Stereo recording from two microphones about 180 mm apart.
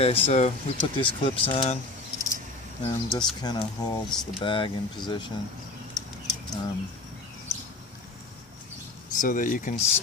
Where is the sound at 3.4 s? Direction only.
20° left (ahead or behind).